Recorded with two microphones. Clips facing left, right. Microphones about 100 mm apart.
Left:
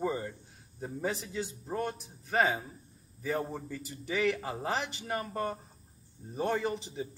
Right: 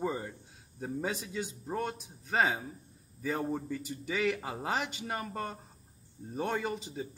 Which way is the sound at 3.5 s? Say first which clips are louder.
Right 5 dB; 15° right (ahead or behind).